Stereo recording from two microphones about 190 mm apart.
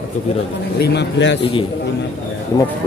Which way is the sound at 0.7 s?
60° left (ahead or behind).